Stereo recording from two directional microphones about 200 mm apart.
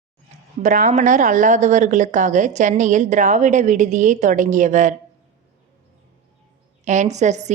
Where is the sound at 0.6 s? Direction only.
40° right (ahead or behind).